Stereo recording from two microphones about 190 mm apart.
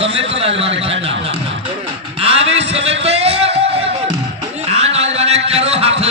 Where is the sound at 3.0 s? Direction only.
30° right (ahead or behind).